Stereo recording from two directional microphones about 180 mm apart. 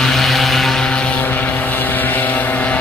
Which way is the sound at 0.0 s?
Centre (ahead or behind).